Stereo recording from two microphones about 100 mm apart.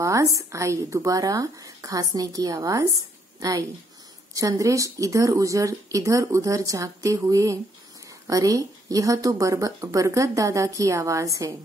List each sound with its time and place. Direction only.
0.0 s speech: 35° right (ahead or behind)